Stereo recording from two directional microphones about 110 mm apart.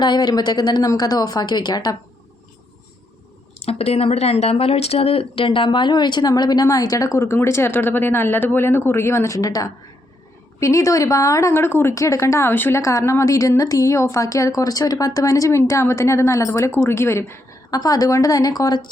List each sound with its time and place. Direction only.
0.0 s speech: 40° left (ahead or behind)
3.6 s a woman's voice: 65° left (ahead or behind); by 17.6 s 25° left (ahead or behind)
17.7 s speech: 35° left (ahead or behind)